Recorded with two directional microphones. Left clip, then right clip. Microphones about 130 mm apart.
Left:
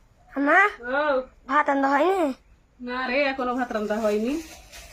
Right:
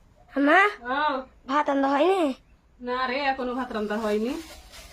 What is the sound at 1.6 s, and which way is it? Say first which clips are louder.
Speech: right 1 dB; 10° right (ahead or behind).